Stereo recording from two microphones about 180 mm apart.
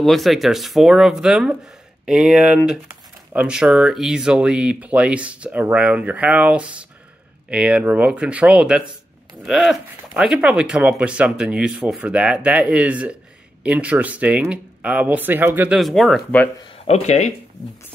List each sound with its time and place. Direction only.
0.0 s speech: centre (ahead or behind)
16.8 s speech: 35° left (ahead or behind)